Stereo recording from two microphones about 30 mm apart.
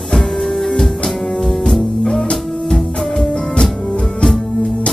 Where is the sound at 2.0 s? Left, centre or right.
Left.